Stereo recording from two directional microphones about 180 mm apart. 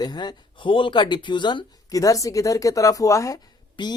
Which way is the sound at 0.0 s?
20° left (ahead or behind).